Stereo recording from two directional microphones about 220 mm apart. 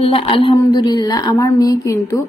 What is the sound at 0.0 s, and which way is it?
A woman's voice, 25° left (ahead or behind).